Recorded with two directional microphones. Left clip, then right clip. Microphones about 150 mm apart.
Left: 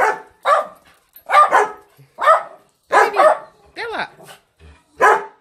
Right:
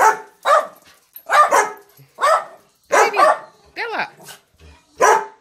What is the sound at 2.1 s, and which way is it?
Dog, centre (ahead or behind).